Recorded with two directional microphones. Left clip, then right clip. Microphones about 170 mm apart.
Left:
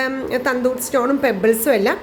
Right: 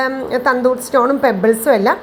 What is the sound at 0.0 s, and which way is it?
A woman's voice, 25° left (ahead or behind).